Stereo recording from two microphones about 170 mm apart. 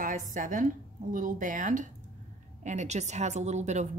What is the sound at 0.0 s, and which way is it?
A woman's voice, 50° right (ahead or behind).